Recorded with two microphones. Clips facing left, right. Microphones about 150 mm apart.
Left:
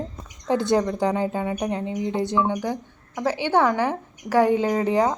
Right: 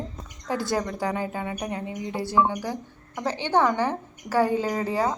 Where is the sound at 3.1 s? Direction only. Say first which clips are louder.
Left 3 dB; 10° left (ahead or behind).